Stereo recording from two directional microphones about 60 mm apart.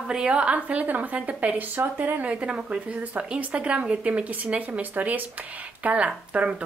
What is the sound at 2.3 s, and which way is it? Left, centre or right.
A woman's voice, right.